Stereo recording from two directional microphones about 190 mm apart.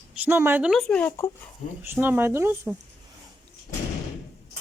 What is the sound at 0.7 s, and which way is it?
Speech, 5° left (ahead or behind).